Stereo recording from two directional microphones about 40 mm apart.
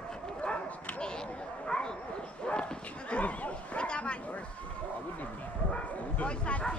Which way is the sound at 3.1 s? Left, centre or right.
Left.